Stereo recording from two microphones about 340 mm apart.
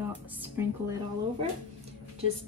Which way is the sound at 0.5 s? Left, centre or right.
Centre.